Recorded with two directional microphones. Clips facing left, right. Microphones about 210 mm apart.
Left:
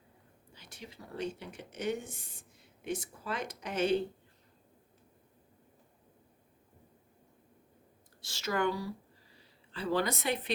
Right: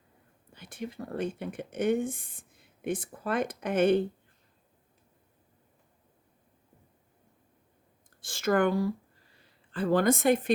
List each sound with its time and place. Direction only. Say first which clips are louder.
0.5 s speech: right 12 dB; 55° right (ahead or behind)
8.2 s a woman's voice: right 7 dB; 50° right (ahead or behind)